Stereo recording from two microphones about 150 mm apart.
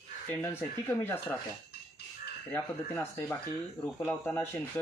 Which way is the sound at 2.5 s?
15° left (ahead or behind).